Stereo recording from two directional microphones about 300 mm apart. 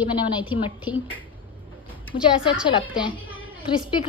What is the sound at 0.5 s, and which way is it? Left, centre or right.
Speech, centre.